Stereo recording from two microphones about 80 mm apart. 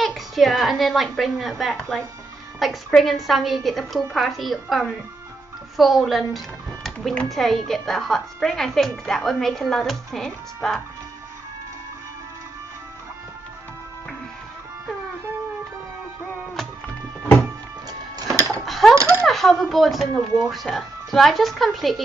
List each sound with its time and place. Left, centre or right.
0.0 s a child's voice: centre
16.8 s music: centre
18.2 s a sound: right
18.7 s a sound: centre
18.9 s coin: right
19.2 s speech: centre